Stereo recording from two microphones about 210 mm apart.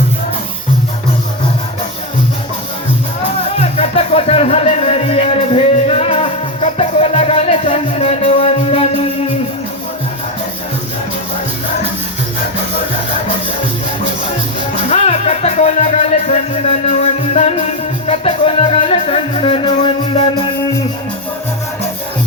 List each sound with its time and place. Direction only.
3.6 s music: 30° left (ahead or behind)
14.8 s music: 30° left (ahead or behind)